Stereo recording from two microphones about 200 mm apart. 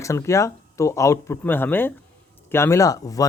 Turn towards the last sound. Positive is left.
turn(degrees=15)  # may be behind; listen again after turning